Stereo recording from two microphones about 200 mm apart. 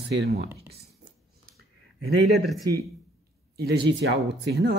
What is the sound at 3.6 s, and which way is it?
Speech, 55° right (ahead or behind).